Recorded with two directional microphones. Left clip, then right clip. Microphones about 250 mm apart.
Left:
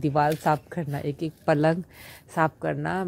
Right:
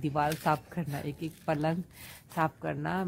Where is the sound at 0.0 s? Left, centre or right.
Centre.